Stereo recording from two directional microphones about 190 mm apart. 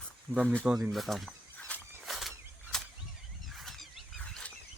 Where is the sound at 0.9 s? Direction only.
Centre (ahead or behind).